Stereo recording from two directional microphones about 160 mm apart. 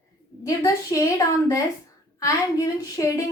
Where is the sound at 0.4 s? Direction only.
20° left (ahead or behind).